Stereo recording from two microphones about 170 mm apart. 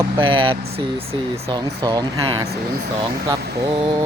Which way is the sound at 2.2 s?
35° right (ahead or behind).